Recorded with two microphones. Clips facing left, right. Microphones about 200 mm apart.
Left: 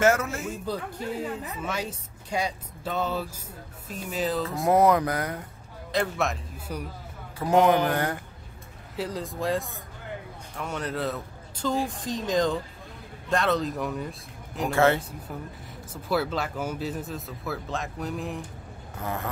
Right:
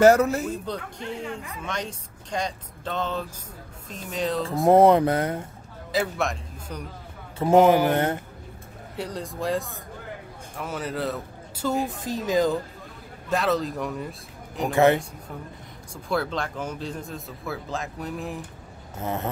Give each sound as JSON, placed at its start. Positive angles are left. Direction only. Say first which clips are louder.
{"t": 0.0, "sound": "speech", "louder": "right 6 dB", "side_deg": -35}
{"t": 0.7, "sound": "speech", "louder": "left 1 dB", "side_deg": 5}
{"t": 4.6, "sound": "mantra", "louder": "right 5 dB", "side_deg": -30}
{"t": 5.9, "sound": "speech", "louder": "right 1 dB", "side_deg": 0}
{"t": 7.5, "sound": "speech", "louder": "right 4 dB", "side_deg": -5}
{"t": 7.9, "sound": "mantra", "louder": "right 4 dB", "side_deg": -25}
{"t": 8.9, "sound": "speech", "louder": "left 1 dB", "side_deg": 0}
{"t": 14.7, "sound": "speech", "louder": "right 3 dB", "side_deg": -15}
{"t": 15.9, "sound": "speech", "louder": "even", "side_deg": 5}
{"t": 18.9, "sound": "mantra", "louder": "right 3 dB", "side_deg": -20}